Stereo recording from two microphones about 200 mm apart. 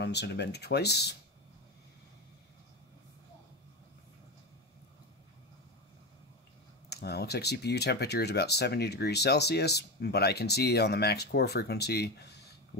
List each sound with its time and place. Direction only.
0.0 s speech: 60° left (ahead or behind)
6.9 s speech: 55° left (ahead or behind)